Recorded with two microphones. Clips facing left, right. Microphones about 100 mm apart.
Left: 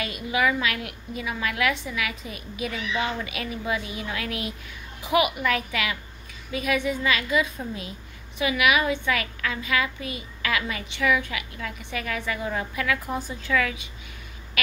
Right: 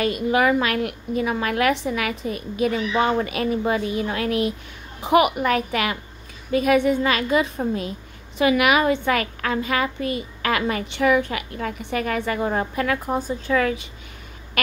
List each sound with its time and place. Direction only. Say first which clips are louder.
0.0 s a child's voice: right 6 dB; 45° right (ahead or behind)
8.4 s a child's voice: right 5 dB; 45° right (ahead or behind)